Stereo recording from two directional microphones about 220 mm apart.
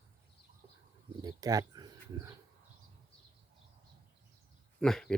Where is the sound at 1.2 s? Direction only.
15° right (ahead or behind).